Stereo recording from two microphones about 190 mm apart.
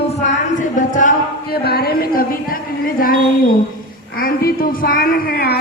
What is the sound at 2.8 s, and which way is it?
Speech, 50° left (ahead or behind).